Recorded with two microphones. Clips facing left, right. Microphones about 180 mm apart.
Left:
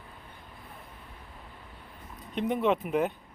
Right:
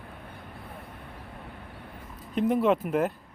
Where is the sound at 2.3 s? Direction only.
Centre (ahead or behind).